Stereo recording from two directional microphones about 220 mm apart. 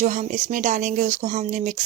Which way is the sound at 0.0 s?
35° right (ahead or behind).